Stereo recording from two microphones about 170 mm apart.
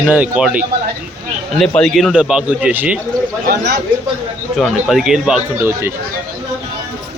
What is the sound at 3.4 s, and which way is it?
Speech, 80° right.